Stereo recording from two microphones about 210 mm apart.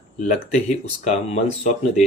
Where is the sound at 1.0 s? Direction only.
35° left (ahead or behind).